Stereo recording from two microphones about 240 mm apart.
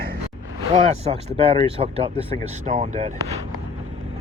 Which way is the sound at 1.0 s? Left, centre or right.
Right.